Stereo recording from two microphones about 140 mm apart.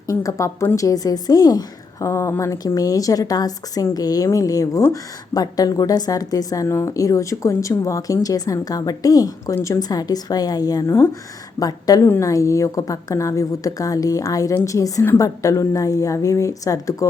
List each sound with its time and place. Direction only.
0.1 s a woman's voice: 25° left (ahead or behind)